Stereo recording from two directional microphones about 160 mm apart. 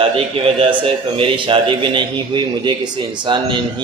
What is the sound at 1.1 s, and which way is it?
A man's voice, 30° right (ahead or behind).